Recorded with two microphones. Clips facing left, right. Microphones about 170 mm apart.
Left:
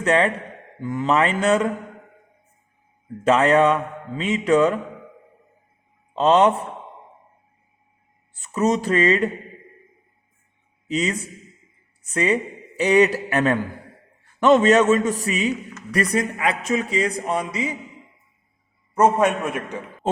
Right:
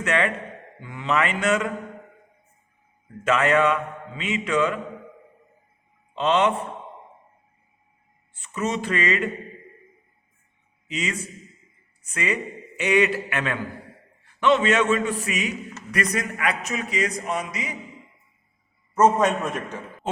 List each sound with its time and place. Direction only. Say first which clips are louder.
0.0 s a man's voice: left 5 dB; 30° left (ahead or behind)
3.2 s a man's voice: left 4 dB; 35° left (ahead or behind)
6.1 s a man's voice: left 5 dB; 35° left (ahead or behind)
8.3 s a man's voice: left 6 dB; 40° left (ahead or behind)
10.8 s a man's voice: left 6 dB; 35° left (ahead or behind)
18.9 s a man's voice: left 1 dB; 10° left (ahead or behind)